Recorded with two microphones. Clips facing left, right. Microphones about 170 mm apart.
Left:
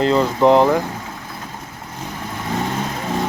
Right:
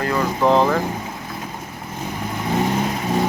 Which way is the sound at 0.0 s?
25° left (ahead or behind).